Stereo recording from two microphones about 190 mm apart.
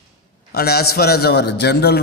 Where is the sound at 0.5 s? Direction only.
55° left (ahead or behind).